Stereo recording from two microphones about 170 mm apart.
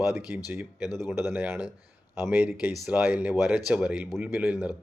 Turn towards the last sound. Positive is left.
turn(degrees=-5)  # may be behind; listen again after turning